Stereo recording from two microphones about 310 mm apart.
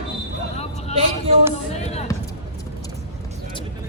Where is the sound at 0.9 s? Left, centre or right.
Centre.